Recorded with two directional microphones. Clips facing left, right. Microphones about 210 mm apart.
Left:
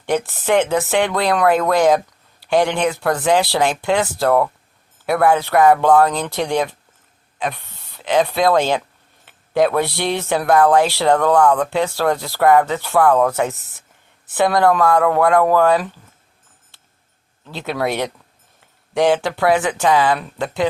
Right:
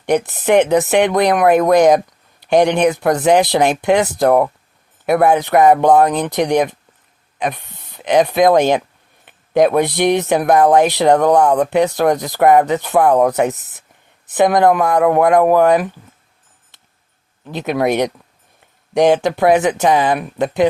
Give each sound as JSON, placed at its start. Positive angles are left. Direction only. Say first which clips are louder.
{"t": 0.0, "sound": "speech", "louder": "right 4 dB", "side_deg": -20}
{"t": 17.4, "sound": "speech", "louder": "right 5 dB", "side_deg": -20}